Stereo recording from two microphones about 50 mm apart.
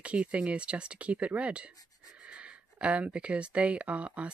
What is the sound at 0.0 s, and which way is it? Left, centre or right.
Speech, right.